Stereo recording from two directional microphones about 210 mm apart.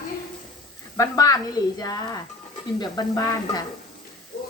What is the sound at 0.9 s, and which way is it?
Speech, 15° left (ahead or behind).